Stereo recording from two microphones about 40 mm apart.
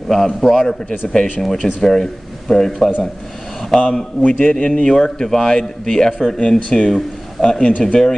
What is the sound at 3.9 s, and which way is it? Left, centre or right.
A man's voice, left.